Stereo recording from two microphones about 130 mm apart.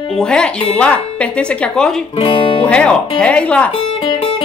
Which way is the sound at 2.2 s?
45° left (ahead or behind).